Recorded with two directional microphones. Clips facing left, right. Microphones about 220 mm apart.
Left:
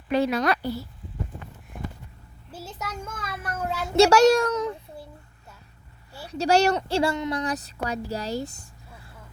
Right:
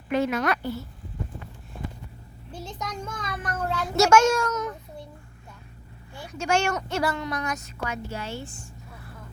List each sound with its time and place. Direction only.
0.1 s speech: 35° left (ahead or behind)
2.5 s a child's voice: 5° left (ahead or behind)
3.8 s speech: 30° left (ahead or behind)
6.2 s a woman's voice: 35° left (ahead or behind)